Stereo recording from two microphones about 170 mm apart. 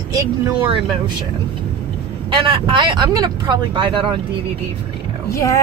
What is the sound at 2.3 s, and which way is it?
Speech, 30° right (ahead or behind).